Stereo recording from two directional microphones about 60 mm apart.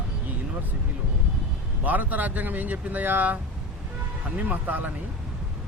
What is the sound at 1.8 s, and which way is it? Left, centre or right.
Speech, right.